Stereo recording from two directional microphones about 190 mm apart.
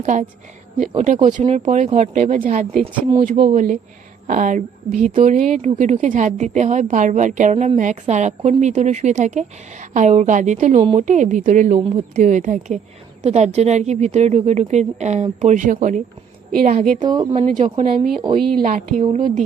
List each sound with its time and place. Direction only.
0.0 s a woman's voice: 40° right (ahead or behind)
17.0 s a woman's voice: 20° right (ahead or behind)
18.6 s a woman's voice: 45° right (ahead or behind)